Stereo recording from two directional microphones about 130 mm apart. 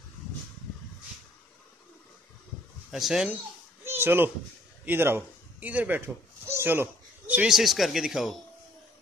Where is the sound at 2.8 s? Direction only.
Centre (ahead or behind).